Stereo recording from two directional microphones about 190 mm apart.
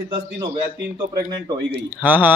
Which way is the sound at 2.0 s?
10° right (ahead or behind).